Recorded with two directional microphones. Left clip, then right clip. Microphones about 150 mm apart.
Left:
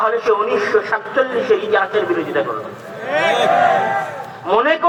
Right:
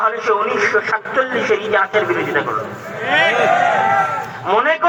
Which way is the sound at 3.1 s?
45° right (ahead or behind).